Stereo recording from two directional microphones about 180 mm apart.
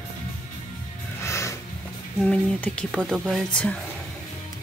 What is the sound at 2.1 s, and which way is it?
Speech, 5° left (ahead or behind).